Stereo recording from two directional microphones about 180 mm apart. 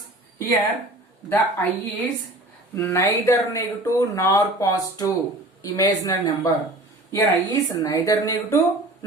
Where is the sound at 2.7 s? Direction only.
15° left (ahead or behind).